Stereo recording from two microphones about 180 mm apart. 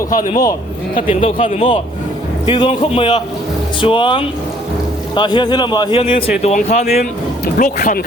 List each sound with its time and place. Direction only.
0.1 s speech: 50° left (ahead or behind)
1.1 s a man's voice: 30° left (ahead or behind)
6.4 s speech: 40° left (ahead or behind)
7.0 s speech: 50° left (ahead or behind)